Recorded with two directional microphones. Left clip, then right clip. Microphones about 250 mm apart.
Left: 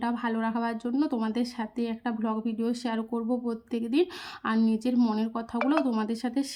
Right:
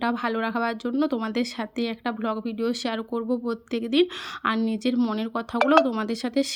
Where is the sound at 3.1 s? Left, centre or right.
Right.